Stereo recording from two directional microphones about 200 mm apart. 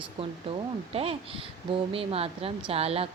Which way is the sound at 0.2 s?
25° right (ahead or behind).